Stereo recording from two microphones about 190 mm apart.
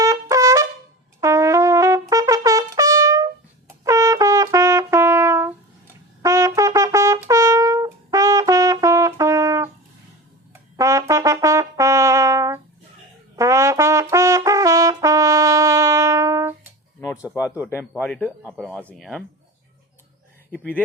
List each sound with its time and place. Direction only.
0.0 s trumpet: 15° right (ahead or behind)
1.2 s brass instrument: 15° right (ahead or behind)
10.5 s music: 15° right (ahead or behind)
11.1 s trumpet: 15° right (ahead or behind)
17.2 s a sound: 10° right (ahead or behind)
17.9 s speech: 5° left (ahead or behind)
20.5 s a sound: 10° left (ahead or behind)